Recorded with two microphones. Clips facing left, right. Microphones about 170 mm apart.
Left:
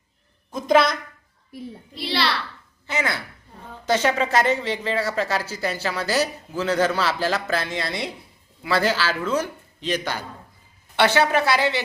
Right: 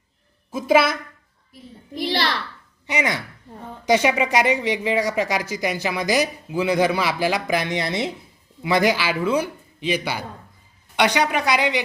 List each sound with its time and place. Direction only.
0.5 s speech: 5° right (ahead or behind)
2.0 s a child's voice: 45° right (ahead or behind)
2.8 s speech: 15° right (ahead or behind)